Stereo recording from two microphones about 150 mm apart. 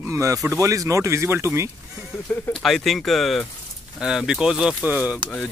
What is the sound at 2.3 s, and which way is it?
Speech, 10° left (ahead or behind).